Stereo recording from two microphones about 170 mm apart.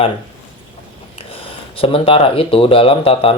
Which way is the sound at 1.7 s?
35° left (ahead or behind).